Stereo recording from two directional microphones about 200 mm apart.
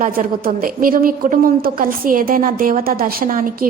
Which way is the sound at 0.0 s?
45° right (ahead or behind).